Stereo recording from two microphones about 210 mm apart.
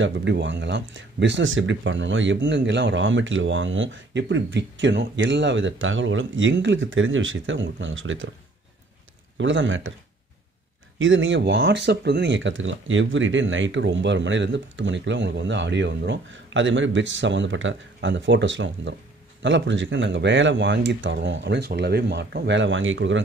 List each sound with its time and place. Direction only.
0.0 s speech: 55° right (ahead or behind)
9.4 s speech: 60° right (ahead or behind)
11.0 s speech: 65° right (ahead or behind)